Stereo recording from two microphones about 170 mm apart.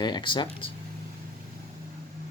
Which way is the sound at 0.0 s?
25° left (ahead or behind).